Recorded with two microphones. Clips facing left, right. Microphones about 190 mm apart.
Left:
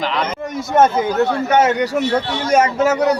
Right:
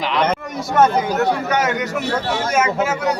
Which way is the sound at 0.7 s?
25° left (ahead or behind).